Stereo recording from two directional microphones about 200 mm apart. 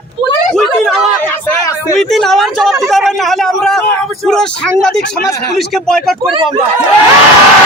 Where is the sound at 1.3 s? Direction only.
10° left (ahead or behind).